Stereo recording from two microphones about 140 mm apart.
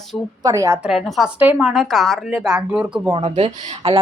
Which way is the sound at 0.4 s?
25° right (ahead or behind).